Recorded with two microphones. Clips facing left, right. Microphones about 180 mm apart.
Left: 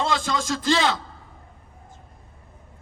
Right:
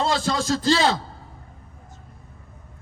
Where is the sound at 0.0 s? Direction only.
35° right (ahead or behind).